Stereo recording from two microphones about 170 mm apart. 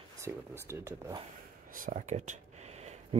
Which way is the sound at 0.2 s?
15° right (ahead or behind).